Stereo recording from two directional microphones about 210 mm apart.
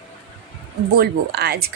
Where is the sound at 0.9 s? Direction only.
50° right (ahead or behind).